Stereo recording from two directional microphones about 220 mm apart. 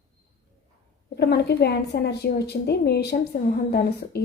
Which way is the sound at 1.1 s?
50° left (ahead or behind).